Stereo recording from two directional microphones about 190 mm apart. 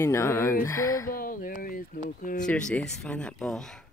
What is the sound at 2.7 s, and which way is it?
Speech, 5° left (ahead or behind).